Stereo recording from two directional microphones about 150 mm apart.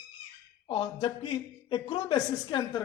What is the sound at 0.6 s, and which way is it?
A woman's voice, 35° left (ahead or behind).